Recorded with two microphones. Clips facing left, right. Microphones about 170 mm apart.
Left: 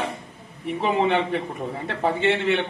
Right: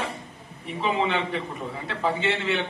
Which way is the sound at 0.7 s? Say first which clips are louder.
Left 4 dB; 55° left (ahead or behind).